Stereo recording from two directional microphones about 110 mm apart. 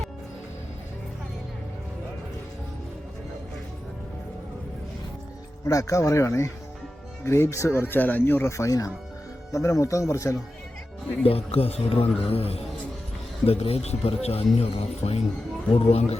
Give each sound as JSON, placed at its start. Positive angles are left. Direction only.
{"t": 5.6, "sound": "speech", "side_deg": 30}
{"t": 11.2, "sound": "speech", "side_deg": 60}